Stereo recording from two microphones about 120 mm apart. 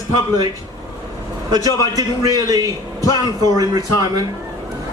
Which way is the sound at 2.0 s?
30° right (ahead or behind).